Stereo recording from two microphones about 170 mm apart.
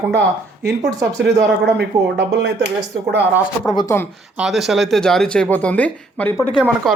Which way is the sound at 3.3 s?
20° left (ahead or behind).